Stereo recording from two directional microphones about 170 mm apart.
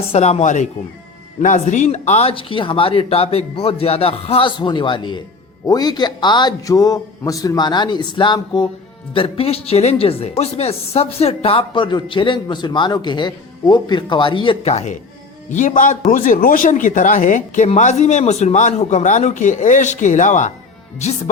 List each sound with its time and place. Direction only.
0.1 s speech: 40° left (ahead or behind)
15.4 s a man's voice: 50° left (ahead or behind)